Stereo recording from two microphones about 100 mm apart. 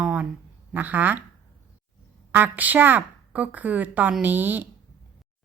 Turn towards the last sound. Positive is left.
turn(degrees=-20)  # may be behind; listen again after turning